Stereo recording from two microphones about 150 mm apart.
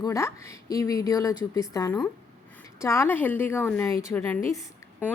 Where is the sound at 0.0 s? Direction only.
20° left (ahead or behind).